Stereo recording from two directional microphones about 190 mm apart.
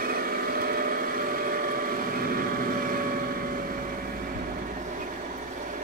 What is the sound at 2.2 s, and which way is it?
Vehicle, 50° right (ahead or behind).